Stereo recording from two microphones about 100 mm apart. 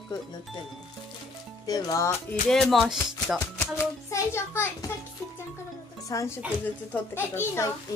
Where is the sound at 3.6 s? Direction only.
30° left (ahead or behind).